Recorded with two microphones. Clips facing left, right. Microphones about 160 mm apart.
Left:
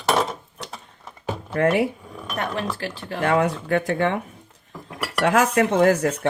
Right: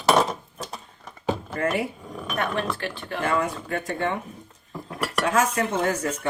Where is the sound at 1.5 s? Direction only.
70° left (ahead or behind).